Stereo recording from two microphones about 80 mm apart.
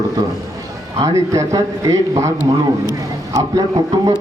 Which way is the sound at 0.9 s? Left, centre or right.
Right.